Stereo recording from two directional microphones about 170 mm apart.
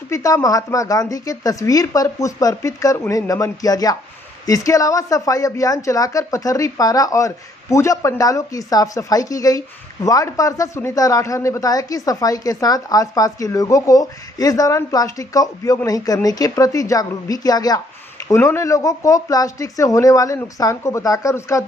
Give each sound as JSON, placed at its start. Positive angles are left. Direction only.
{"t": 0.1, "sound": "speech", "side_deg": 20}